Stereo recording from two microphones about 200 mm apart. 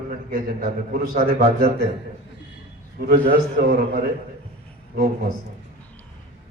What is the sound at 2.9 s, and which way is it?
A man's voice, 50° right (ahead or behind).